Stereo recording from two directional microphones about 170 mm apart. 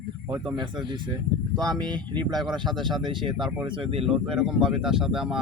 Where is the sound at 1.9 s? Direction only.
25° right (ahead or behind).